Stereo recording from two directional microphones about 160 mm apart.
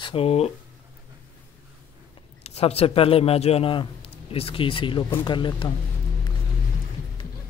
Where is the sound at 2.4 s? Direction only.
40° left (ahead or behind).